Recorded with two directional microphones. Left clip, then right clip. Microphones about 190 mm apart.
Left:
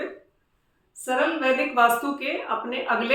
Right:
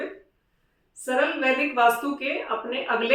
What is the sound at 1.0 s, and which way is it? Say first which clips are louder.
A woman's voice: even; 20° left (ahead or behind).